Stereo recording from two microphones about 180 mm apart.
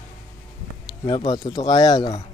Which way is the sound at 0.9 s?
25° left (ahead or behind).